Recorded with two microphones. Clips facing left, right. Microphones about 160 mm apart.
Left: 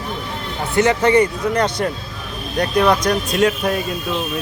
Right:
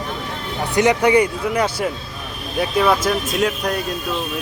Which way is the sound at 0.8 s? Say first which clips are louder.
Left 1 dB; 15° right (ahead or behind).